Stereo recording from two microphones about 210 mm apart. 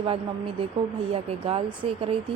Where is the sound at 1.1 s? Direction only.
25° right (ahead or behind).